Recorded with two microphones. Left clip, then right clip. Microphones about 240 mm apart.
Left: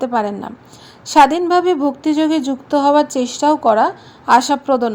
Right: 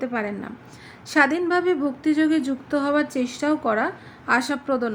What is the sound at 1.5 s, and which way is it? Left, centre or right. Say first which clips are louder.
A woman's voice: left 7 dB; centre.